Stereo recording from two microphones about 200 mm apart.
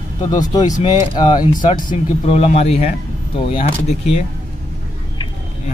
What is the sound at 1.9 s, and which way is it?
Speech, 35° left (ahead or behind).